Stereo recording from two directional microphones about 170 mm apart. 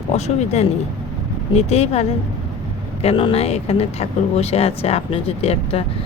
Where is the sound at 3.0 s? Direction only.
30° left (ahead or behind).